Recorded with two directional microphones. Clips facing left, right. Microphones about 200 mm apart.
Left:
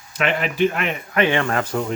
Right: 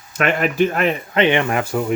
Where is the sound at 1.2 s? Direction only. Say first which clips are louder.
Right 1 dB; 20° right (ahead or behind).